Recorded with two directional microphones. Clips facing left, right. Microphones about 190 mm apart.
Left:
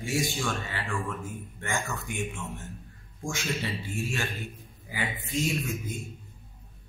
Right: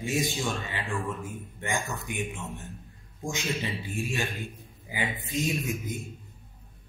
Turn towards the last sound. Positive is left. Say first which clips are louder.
# right 1 dB
turn(degrees=-15)  # may be behind; listen again after turning